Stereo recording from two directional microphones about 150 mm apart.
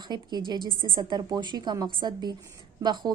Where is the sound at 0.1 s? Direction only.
30° right (ahead or behind).